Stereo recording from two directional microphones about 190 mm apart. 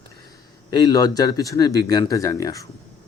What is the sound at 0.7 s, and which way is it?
A man's voice, 20° left (ahead or behind).